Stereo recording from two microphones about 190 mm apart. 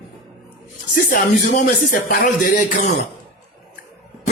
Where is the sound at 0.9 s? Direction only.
45° left (ahead or behind).